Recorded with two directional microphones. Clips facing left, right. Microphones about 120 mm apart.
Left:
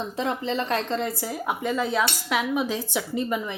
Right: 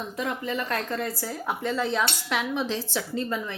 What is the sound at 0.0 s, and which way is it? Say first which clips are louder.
A woman's voice: left 3 dB; 25° left (ahead or behind).